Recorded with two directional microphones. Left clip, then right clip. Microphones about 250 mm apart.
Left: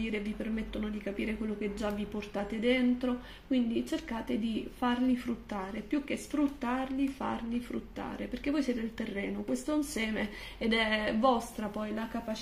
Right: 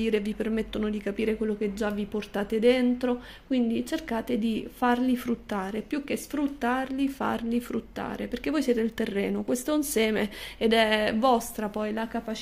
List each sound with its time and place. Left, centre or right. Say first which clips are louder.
0.0 s speech: right 9 dB; right